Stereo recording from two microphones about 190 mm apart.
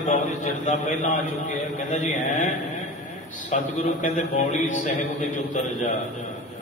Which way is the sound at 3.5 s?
40° left (ahead or behind).